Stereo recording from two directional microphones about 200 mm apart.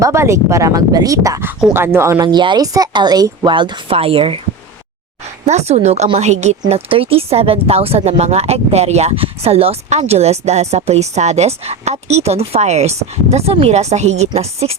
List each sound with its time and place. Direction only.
0.0 s speech: 15° right (ahead or behind)
5.5 s speech: 35° right (ahead or behind)